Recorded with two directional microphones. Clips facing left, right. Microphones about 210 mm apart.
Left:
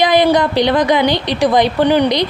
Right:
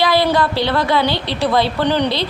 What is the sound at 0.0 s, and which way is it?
Speech, 20° left (ahead or behind).